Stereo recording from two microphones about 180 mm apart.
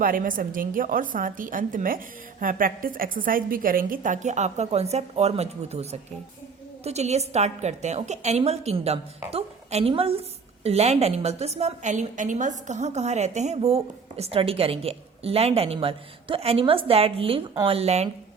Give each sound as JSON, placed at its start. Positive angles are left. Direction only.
{"t": 0.0, "sound": "a woman's voice", "side_deg": -50}